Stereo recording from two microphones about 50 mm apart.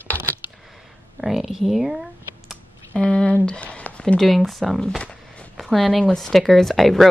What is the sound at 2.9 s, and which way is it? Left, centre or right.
Speech, centre.